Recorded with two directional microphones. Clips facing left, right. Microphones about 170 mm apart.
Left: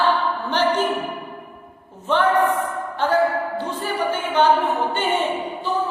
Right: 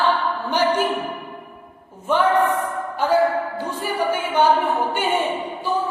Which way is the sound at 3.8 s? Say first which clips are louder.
Right 3 dB; 10° right (ahead or behind).